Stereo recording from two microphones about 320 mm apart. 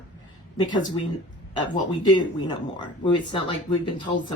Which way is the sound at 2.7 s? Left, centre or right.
Centre.